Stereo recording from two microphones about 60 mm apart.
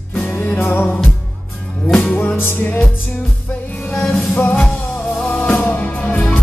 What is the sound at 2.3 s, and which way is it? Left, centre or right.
Music, left.